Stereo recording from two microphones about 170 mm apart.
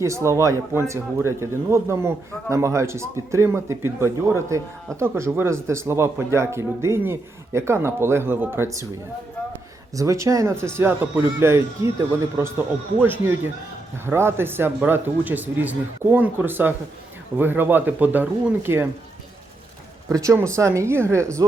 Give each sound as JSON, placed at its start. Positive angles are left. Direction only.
{"t": 0.0, "sound": "speech", "side_deg": -15}
{"t": 9.9, "sound": "speech", "side_deg": -20}
{"t": 20.1, "sound": "speech", "side_deg": -20}